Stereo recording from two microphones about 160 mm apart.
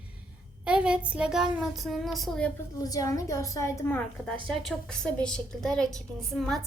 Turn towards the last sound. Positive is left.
turn(degrees=0)  # may be behind; listen again after turning